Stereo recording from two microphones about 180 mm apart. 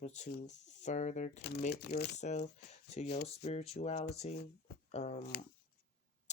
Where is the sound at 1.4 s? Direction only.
65° left (ahead or behind).